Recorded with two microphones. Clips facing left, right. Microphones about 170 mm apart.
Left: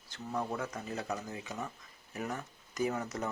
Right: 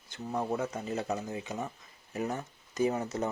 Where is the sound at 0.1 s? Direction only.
20° right (ahead or behind).